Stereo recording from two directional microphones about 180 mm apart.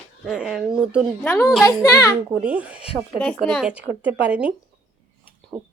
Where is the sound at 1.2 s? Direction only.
15° left (ahead or behind).